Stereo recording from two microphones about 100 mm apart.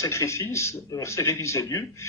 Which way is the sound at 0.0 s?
30° left (ahead or behind).